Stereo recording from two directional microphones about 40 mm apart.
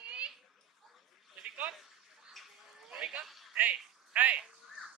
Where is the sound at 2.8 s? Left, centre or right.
Centre.